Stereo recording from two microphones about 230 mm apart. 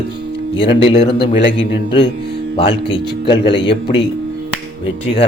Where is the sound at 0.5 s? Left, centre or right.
Left.